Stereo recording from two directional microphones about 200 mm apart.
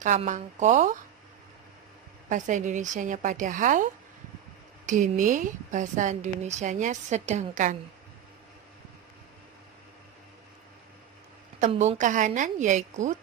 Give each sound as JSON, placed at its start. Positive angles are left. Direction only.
{"t": 0.0, "sound": "a woman's voice", "side_deg": -40}
{"t": 2.3, "sound": "a woman's voice", "side_deg": -40}
{"t": 4.9, "sound": "a woman's voice", "side_deg": -40}
{"t": 11.6, "sound": "a woman's voice", "side_deg": -35}